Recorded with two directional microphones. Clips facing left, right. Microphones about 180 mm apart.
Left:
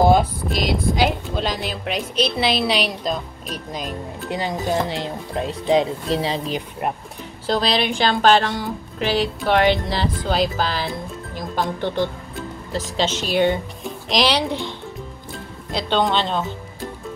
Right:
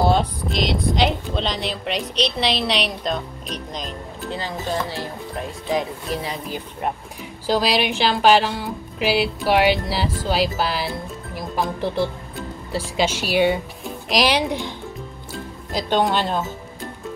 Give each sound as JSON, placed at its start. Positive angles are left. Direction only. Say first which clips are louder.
{"t": 0.0, "sound": "speech", "louder": "left 3 dB", "side_deg": 10}
{"t": 7.4, "sound": "speech", "louder": "right 1 dB", "side_deg": -10}
{"t": 15.9, "sound": "speech", "louder": "even", "side_deg": -10}